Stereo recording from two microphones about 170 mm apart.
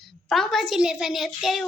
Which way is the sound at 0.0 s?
Centre (ahead or behind).